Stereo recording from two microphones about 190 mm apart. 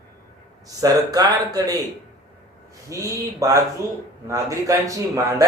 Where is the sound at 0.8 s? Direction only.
20° right (ahead or behind).